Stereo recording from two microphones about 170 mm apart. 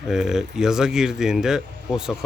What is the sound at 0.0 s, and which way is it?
Speech, 5° right (ahead or behind).